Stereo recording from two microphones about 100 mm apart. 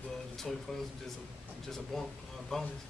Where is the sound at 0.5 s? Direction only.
5° left (ahead or behind).